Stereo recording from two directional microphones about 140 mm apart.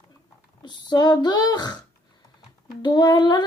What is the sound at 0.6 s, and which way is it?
Female singing, 30° left (ahead or behind).